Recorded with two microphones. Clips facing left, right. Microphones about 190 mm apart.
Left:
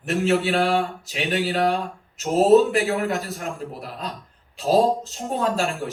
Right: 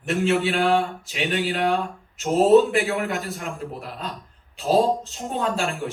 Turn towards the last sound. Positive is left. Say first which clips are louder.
# left 2 dB
turn(degrees=40)  # may be behind; listen again after turning